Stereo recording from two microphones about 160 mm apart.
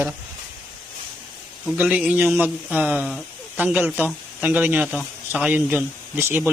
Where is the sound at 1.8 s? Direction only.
10° right (ahead or behind).